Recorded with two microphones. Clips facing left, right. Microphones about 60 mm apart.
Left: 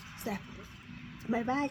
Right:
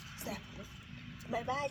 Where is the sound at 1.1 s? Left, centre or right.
Left.